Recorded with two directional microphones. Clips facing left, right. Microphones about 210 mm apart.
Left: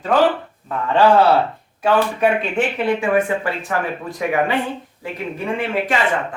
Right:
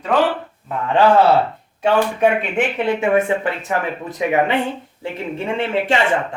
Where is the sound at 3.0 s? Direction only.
25° right (ahead or behind).